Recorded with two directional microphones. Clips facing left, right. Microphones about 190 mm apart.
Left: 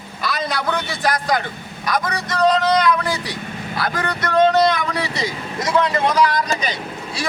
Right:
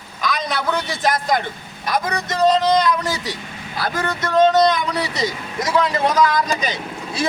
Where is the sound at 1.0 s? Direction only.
20° right (ahead or behind).